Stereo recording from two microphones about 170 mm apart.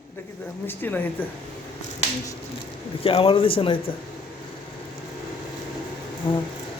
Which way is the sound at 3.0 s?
35° left (ahead or behind).